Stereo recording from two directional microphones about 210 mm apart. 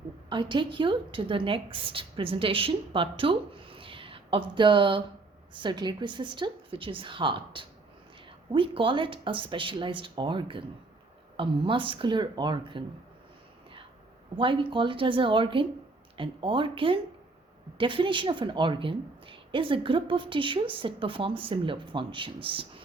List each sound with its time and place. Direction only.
0.3 s a woman's voice: 20° right (ahead or behind)
14.3 s speech: 25° right (ahead or behind)